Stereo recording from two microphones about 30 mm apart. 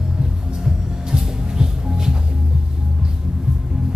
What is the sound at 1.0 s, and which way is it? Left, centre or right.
Music, right.